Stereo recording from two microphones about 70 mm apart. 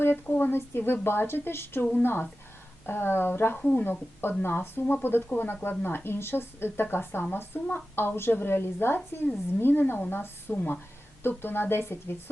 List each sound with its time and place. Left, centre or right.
0.0 s speech: left
3.6 s speech: centre
3.8 s speech: left